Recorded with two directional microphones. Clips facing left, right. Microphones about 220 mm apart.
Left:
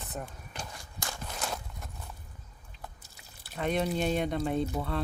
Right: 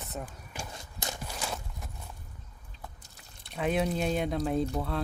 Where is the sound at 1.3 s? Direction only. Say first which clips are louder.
Even; centre (ahead or behind).